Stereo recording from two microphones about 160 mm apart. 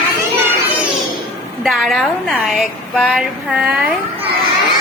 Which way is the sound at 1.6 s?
Centre (ahead or behind).